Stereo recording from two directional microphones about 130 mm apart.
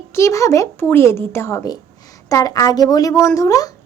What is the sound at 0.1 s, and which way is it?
A woman's voice, 20° left (ahead or behind).